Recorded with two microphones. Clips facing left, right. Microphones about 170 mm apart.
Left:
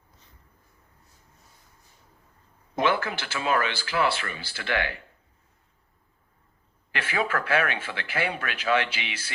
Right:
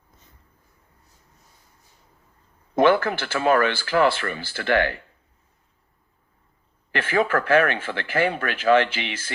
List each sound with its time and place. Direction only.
2.7 s speech: 50° right (ahead or behind)
6.9 s speech: 50° right (ahead or behind)